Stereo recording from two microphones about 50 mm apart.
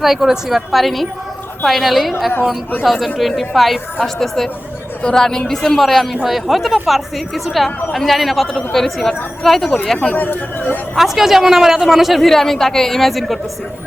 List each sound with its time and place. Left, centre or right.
0.0 s a woman's voice: centre
10.2 s speech: left
10.9 s a woman's voice: centre